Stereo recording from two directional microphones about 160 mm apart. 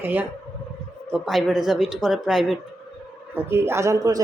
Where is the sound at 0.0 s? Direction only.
10° right (ahead or behind).